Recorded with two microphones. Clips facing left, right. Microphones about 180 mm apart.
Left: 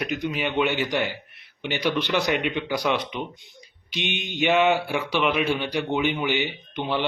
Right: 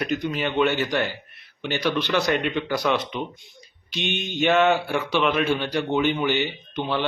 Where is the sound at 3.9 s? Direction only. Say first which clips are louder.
Right 2 dB; 15° left (ahead or behind).